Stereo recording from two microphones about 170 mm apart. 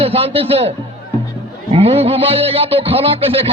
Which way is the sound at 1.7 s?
35° right (ahead or behind).